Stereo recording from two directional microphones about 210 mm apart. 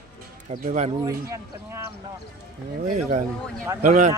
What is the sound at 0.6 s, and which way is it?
Speech, 35° right (ahead or behind).